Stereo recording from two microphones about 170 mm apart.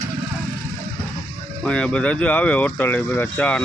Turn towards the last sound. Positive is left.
turn(degrees=10)  # may be behind; listen again after turning